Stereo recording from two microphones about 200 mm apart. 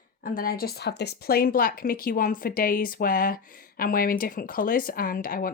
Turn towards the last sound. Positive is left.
turn(degrees=45)  # may be behind; listen again after turning